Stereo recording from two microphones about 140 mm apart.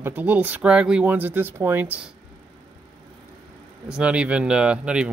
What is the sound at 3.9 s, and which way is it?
Speech, 10° right (ahead or behind).